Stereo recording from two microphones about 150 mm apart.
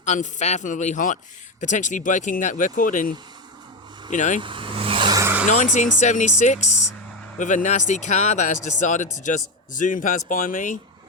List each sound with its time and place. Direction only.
0.0 s speech: 50° left (ahead or behind)
4.1 s speech: 55° left (ahead or behind)
4.4 s vehicle: 35° right (ahead or behind)
5.2 s a sound: 10° right (ahead or behind)
5.5 s speech: 50° left (ahead or behind)